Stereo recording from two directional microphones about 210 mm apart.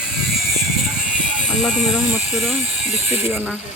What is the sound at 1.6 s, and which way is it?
Speech, centre (ahead or behind).